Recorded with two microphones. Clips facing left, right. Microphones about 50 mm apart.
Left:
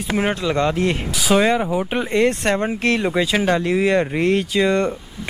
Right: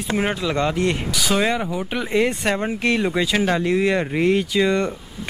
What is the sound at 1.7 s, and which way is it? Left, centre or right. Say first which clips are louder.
Speech: left 4 dB; centre.